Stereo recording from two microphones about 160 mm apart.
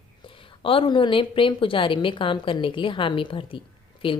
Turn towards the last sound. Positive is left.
turn(degrees=35)  # may be behind; listen again after turning